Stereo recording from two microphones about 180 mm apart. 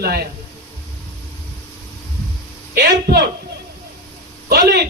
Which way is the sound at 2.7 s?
65° right (ahead or behind).